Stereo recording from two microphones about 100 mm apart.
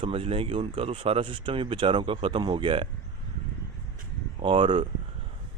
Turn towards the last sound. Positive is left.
turn(degrees=-55)  # may be behind; listen again after turning